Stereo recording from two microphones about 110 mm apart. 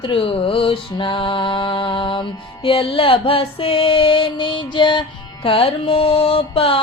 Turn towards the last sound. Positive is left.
turn(degrees=60)  # may be behind; listen again after turning